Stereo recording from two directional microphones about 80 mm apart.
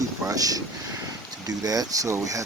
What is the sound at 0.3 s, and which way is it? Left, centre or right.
Speech, right.